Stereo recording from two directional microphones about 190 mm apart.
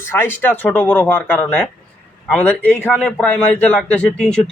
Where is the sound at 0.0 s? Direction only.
10° left (ahead or behind).